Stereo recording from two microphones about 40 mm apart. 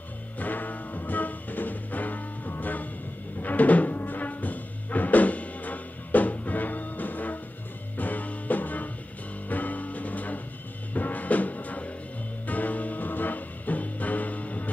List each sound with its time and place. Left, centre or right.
0.4 s music: left